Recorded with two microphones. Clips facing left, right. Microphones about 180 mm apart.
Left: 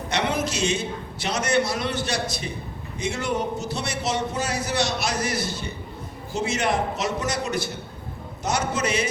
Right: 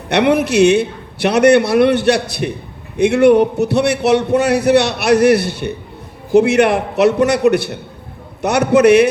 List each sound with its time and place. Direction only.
0.1 s a man's voice: 65° right (ahead or behind)